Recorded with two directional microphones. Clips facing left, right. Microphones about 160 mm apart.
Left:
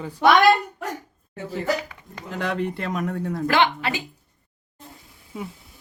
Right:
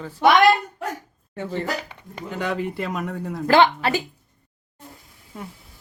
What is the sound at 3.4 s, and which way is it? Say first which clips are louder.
Speech: right 5 dB; 35° right (ahead or behind).